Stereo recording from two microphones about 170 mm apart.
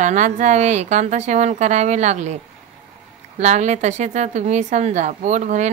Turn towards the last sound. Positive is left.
turn(degrees=-45)  # may be behind; listen again after turning